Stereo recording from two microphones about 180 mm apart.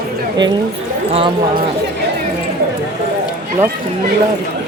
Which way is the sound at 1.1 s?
30° right (ahead or behind).